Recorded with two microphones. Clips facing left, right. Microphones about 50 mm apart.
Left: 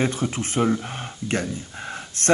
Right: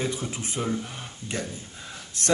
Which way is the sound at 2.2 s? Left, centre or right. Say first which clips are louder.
Left 5 dB; left.